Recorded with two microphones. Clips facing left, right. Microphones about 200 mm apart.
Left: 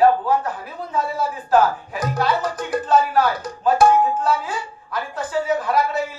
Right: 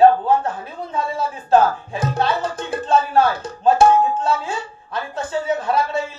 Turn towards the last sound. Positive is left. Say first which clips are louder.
# even
turn(degrees=-25)  # may be behind; listen again after turning